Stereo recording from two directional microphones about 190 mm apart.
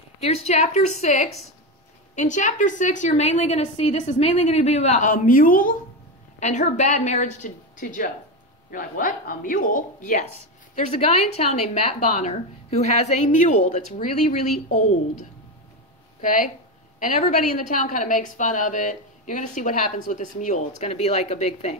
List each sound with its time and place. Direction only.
0.2 s a woman's voice: 35° left (ahead or behind)
11.0 s a woman's voice: 35° left (ahead or behind)
16.2 s a woman's voice: 45° left (ahead or behind)